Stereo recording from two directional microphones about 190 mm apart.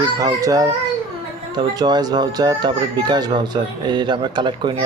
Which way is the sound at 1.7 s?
20° right (ahead or behind).